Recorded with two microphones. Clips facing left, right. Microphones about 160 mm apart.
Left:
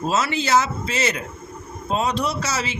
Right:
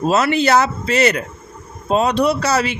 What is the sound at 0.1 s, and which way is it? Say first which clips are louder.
Speech: right 5 dB; 60° right (ahead or behind).